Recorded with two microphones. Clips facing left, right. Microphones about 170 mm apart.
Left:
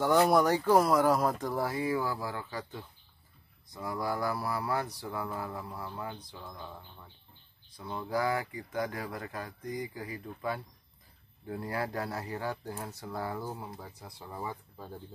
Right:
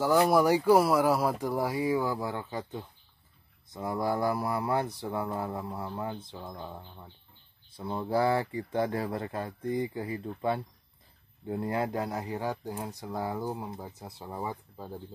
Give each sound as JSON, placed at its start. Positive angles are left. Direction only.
{"t": 0.3, "sound": "speech", "side_deg": -10}